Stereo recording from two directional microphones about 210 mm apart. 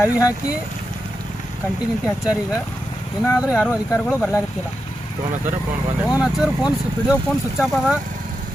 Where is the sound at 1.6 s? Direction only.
10° left (ahead or behind).